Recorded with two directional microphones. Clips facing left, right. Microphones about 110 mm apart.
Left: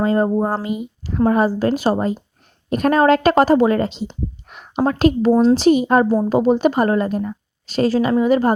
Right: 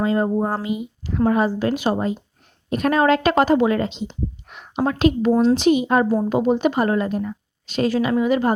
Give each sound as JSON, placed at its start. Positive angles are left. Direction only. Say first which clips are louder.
{"t": 0.0, "sound": "a woman's voice", "louder": "left 3 dB", "side_deg": 40}